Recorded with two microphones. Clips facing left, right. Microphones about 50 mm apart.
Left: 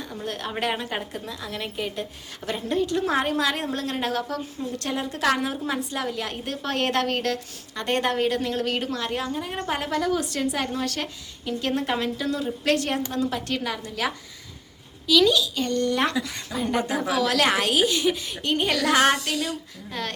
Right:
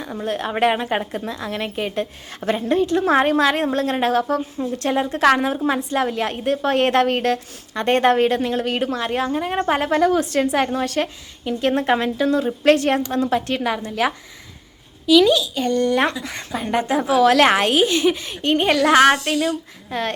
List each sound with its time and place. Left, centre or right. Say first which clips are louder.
0.3 s a woman's voice: right 8 dB; right
8.4 s a woman's voice: right 5 dB; right
9.3 s a woman's voice: right 8 dB; right
15.0 s a woman's voice: right 5 dB; right